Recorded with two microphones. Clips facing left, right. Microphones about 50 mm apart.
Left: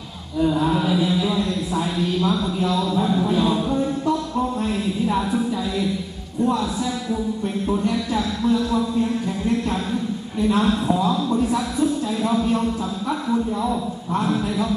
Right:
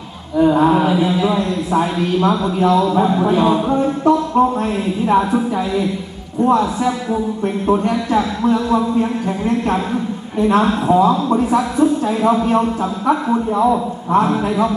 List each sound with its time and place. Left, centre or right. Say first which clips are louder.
0.3 s speech: right 7 dB; right
3.5 s music: right 5 dB; right
6.4 s music: right 7 dB; right
8.1 s speech: right 6 dB; right
13.5 s music: right 8 dB; right
14.4 s speech: right 6 dB; right